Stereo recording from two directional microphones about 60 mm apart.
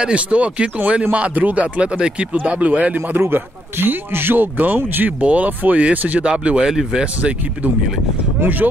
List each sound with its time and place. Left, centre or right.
0.0 s speech: centre
3.2 s a man's voice: right
5.2 s speech: right; by 7.1 s centre
7.2 s speech: right